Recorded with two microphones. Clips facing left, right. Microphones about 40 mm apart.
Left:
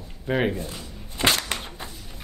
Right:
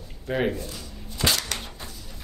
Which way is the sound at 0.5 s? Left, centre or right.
Left.